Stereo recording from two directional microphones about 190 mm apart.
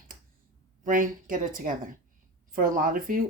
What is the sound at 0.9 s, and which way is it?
Speech, 45° right (ahead or behind).